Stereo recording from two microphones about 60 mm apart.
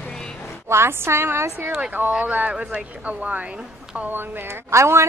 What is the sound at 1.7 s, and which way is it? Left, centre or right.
Speech, right.